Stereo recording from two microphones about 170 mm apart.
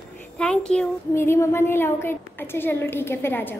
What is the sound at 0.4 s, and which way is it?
A woman's voice, 5° left (ahead or behind).